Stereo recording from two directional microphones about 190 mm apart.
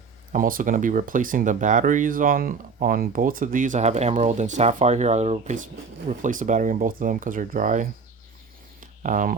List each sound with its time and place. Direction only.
0.3 s speech: 45° right (ahead or behind)
9.0 s speech: 45° right (ahead or behind)